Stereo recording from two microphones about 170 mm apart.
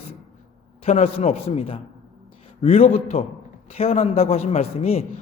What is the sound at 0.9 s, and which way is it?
A man's voice, 40° left (ahead or behind).